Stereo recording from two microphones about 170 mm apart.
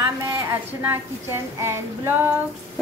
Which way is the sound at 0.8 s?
15° right (ahead or behind).